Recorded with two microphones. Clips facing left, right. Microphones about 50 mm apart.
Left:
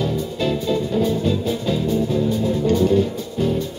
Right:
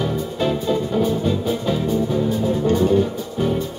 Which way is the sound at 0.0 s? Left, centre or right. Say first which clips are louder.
Even; right.